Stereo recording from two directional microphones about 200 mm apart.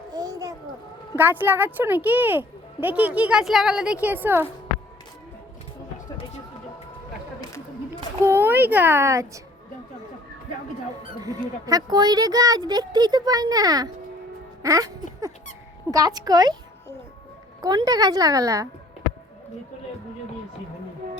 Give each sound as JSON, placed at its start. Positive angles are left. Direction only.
{"t": 0.1, "sound": "a sound", "side_deg": -20}
{"t": 1.1, "sound": "speech", "side_deg": -10}
{"t": 8.2, "sound": "speech", "side_deg": -10}
{"t": 11.2, "sound": "speech", "side_deg": -20}
{"t": 14.6, "sound": "music", "side_deg": -15}
{"t": 15.9, "sound": "speech", "side_deg": -20}
{"t": 17.6, "sound": "speech", "side_deg": -20}